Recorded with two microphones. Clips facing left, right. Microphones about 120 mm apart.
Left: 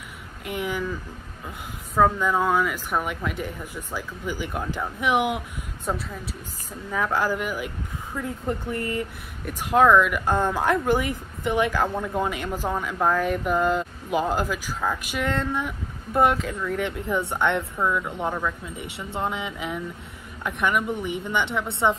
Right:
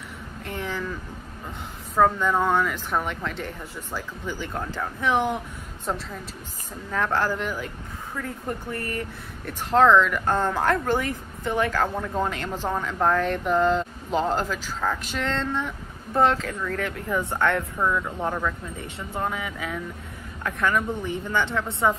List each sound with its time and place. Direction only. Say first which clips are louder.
0.5 s speech: left 3 dB; 15° left (ahead or behind)
2.0 s speech: even; 5° left (ahead or behind)
17.7 s speech: even; 10° left (ahead or behind)
19.1 s speech: left 1 dB; 20° left (ahead or behind)